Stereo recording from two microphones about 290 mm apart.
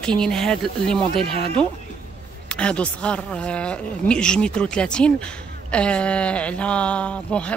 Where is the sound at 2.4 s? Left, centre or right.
Centre.